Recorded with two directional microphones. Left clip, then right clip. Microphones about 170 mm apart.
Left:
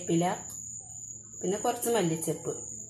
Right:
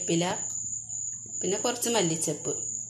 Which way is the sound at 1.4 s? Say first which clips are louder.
Right 1 dB; 10° right (ahead or behind).